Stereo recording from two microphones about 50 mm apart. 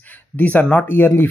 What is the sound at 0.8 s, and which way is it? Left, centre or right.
Speech, left.